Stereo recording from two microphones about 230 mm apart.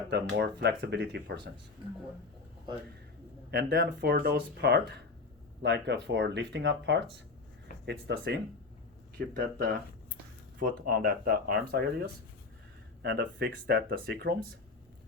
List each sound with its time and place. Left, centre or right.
0.1 s speech: right
3.5 s speech: right
9.1 s speech: right
13.0 s speech: right